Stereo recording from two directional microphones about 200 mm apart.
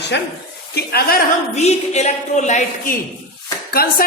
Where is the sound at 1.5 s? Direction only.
35° left (ahead or behind).